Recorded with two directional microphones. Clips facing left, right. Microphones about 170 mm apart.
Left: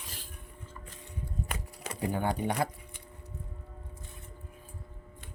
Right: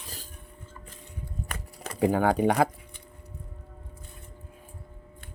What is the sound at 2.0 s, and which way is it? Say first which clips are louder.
Speech: right 9 dB; 90° right.